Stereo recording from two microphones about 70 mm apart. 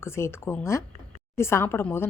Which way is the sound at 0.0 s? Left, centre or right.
Left.